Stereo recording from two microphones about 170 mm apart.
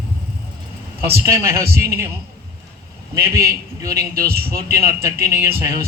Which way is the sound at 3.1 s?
15° right (ahead or behind).